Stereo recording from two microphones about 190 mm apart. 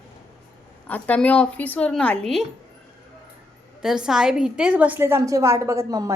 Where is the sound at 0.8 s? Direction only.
10° left (ahead or behind).